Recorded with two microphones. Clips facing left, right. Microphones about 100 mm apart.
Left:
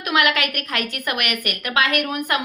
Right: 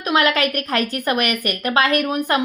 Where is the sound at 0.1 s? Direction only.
35° right (ahead or behind).